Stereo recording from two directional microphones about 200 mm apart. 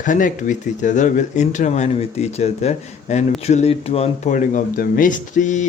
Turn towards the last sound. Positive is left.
turn(degrees=40)  # may be behind; listen again after turning